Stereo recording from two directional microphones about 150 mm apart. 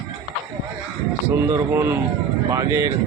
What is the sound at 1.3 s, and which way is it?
Speech, 20° right (ahead or behind).